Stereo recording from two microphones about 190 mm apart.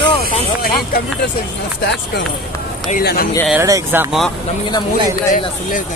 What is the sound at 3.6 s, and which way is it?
Speech, 15° right (ahead or behind).